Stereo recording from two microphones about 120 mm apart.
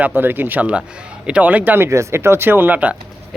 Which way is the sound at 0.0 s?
15° right (ahead or behind).